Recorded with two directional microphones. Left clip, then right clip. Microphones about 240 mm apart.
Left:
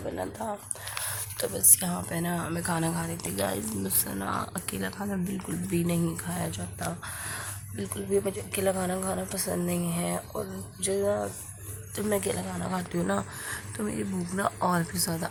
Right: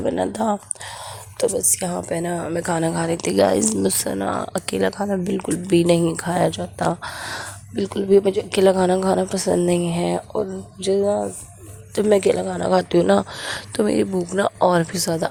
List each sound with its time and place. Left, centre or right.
0.0 s a woman's voice: right